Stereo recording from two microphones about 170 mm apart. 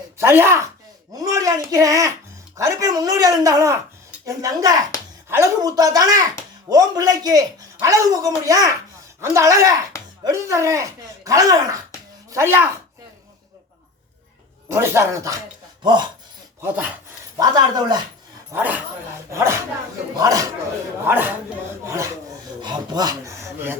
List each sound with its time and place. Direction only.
0.2 s speech: 15° right (ahead or behind)
14.7 s speech: 15° right (ahead or behind)
16.6 s speech: 10° right (ahead or behind)
17.3 s speech: 20° right (ahead or behind)
18.5 s speech: 10° right (ahead or behind)